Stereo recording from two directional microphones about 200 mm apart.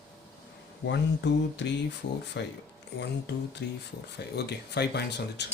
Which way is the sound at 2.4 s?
55° left (ahead or behind).